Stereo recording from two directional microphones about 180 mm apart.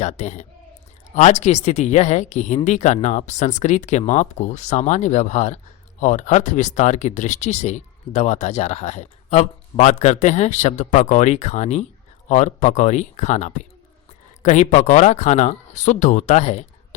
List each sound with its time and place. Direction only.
0.0 s speech: 40° left (ahead or behind)